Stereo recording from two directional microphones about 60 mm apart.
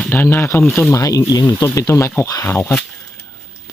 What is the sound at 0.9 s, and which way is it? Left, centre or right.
Speech, left.